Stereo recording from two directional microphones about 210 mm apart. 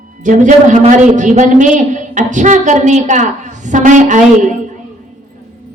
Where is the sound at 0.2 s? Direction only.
35° right (ahead or behind).